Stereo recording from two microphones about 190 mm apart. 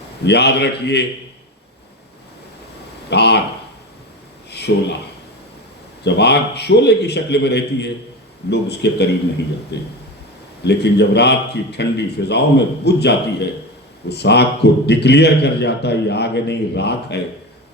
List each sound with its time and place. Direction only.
0.3 s a man's voice: 60° left (ahead or behind)
3.1 s a man's voice: 60° left (ahead or behind)
4.5 s speech: 60° left (ahead or behind)
6.1 s a man's voice: 60° left (ahead or behind)